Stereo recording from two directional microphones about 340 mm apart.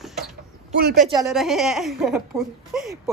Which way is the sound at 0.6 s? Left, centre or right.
Right.